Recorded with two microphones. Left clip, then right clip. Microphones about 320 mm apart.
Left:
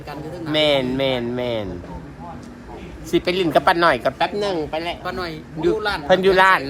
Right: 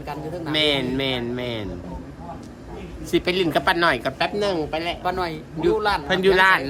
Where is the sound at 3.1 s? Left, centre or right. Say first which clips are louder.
Left 3 dB; centre.